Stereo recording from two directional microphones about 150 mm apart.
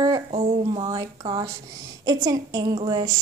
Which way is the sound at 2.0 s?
25° right (ahead or behind).